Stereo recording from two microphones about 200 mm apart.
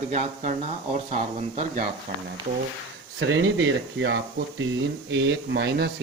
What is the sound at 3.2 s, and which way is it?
Speech, 65° right (ahead or behind).